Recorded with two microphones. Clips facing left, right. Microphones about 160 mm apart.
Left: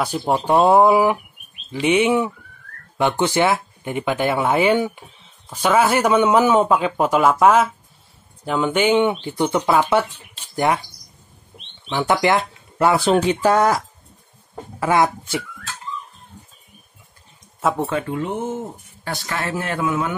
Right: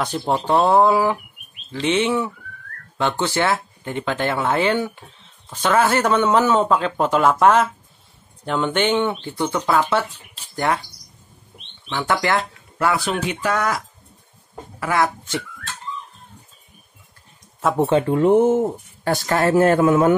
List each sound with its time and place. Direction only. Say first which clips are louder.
0.0 s a man's voice: left 1 dB; 10° left (ahead or behind)
10.0 s speech: right 1 dB; centre (ahead or behind)
10.5 s speech: left 2 dB; 15° left (ahead or behind)
11.9 s speech: left 3 dB; 15° left (ahead or behind); by 13.7 s 35° left (ahead or behind)
14.8 s speech: left 3 dB; 20° left (ahead or behind)
15.2 s speech: left 1 dB; 5° left (ahead or behind)
17.7 s speech: right 6 dB; 30° right (ahead or behind)
18.2 s speech: right 11 dB; 50° right (ahead or behind)